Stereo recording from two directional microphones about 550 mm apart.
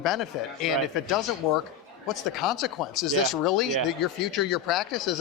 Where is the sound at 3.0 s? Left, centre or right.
Centre.